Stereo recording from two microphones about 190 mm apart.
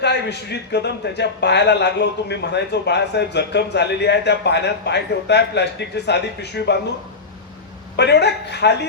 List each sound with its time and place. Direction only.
0.0 s a man's voice: 65° left (ahead or behind)
7.9 s a man's voice: 65° left (ahead or behind)